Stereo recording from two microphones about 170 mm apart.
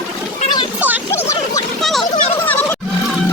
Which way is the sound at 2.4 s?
10° left (ahead or behind).